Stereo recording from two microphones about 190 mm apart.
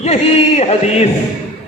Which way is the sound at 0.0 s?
35° left (ahead or behind).